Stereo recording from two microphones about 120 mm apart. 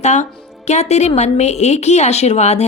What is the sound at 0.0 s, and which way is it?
A woman's voice, 75° left (ahead or behind).